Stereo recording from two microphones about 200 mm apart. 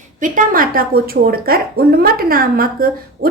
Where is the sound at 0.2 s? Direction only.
40° right (ahead or behind).